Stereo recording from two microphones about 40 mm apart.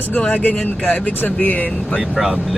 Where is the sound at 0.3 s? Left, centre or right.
Left.